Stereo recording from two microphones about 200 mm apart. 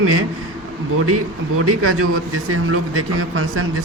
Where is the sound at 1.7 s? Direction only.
90° right.